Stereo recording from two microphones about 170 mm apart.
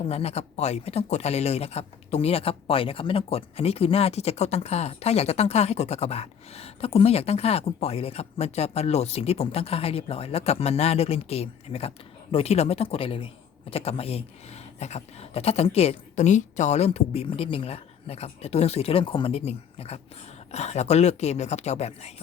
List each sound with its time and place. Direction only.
0.0 s speech: 35° left (ahead or behind)